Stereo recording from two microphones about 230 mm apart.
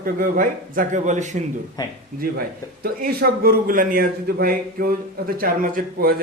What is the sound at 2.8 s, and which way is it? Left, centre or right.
A man's voice, right.